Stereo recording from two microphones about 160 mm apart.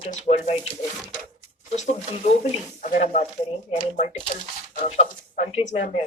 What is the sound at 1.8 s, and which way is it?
Speech, 45° left (ahead or behind).